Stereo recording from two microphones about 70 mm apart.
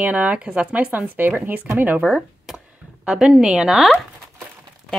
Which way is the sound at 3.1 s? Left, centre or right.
Centre.